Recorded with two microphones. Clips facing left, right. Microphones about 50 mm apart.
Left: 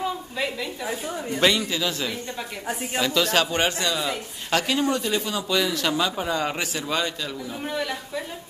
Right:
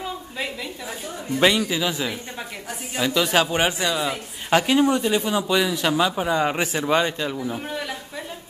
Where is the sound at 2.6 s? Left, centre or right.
Left.